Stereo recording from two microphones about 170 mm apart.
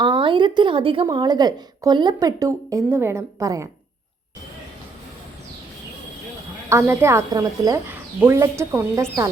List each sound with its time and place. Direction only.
0.0 s a woman's voice: 30° right (ahead or behind)
6.7 s a woman's voice: 15° right (ahead or behind)